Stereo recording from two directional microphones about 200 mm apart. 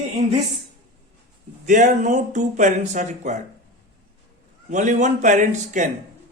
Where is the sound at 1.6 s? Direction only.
40° right (ahead or behind).